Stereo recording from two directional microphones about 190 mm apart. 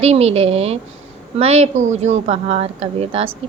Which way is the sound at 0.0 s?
35° right (ahead or behind).